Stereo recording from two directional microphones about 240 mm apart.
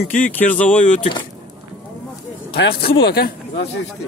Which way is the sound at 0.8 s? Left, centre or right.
Left.